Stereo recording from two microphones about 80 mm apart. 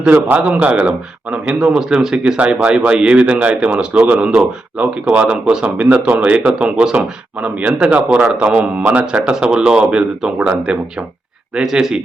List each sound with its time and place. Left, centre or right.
0.0 s a man's voice: centre